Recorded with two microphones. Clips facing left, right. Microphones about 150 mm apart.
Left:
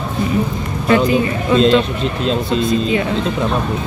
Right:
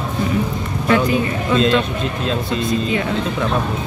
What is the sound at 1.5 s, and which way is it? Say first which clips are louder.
Speech: left 4 dB; 30° left (ahead or behind).